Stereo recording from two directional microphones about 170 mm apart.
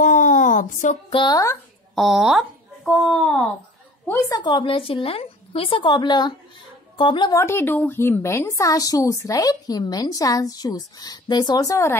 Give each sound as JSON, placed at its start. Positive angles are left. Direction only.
{"t": 0.0, "sound": "a sound", "side_deg": 50}
{"t": 1.1, "sound": "a woman's voice", "side_deg": 25}
{"t": 2.0, "sound": "speech", "side_deg": 0}
{"t": 4.1, "sound": "a woman's voice", "side_deg": 15}
{"t": 4.4, "sound": "a woman's voice", "side_deg": 30}
{"t": 7.3, "sound": "a woman's voice", "side_deg": 15}